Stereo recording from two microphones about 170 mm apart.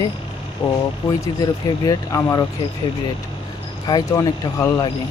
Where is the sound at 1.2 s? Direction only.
20° left (ahead or behind).